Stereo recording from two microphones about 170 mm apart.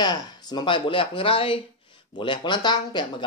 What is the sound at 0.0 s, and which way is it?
Speech, 25° left (ahead or behind).